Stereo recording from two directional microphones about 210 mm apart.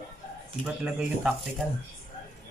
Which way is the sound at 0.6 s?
5° right (ahead or behind).